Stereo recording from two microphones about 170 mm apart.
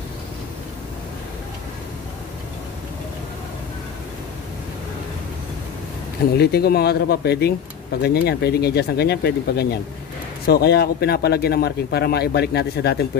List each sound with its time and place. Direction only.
6.3 s speech: 70° left (ahead or behind)